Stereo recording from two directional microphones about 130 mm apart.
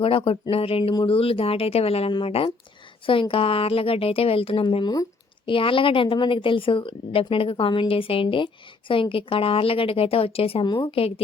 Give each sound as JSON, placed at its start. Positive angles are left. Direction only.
{"t": 0.0, "sound": "a woman's voice", "side_deg": 45}